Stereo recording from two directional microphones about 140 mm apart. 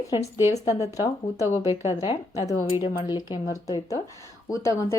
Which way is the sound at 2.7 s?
35° left (ahead or behind).